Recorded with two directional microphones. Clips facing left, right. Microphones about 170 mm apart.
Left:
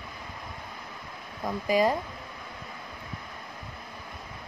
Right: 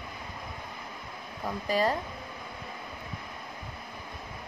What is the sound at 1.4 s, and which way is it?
Speech, 10° left (ahead or behind).